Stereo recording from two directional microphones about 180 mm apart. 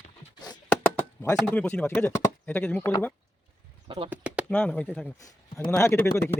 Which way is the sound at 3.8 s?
30° right (ahead or behind).